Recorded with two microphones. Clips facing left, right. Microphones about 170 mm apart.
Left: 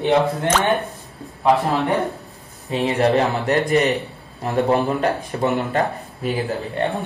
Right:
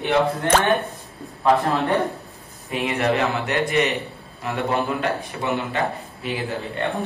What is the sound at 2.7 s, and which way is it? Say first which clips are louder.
A man's voice: left 4 dB; 35° left (ahead or behind).